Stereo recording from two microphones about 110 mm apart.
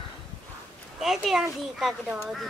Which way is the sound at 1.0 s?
5° right (ahead or behind).